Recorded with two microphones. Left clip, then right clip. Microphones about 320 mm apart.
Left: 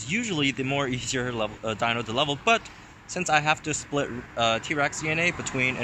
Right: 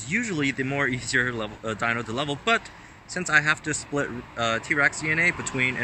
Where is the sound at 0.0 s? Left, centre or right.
Centre.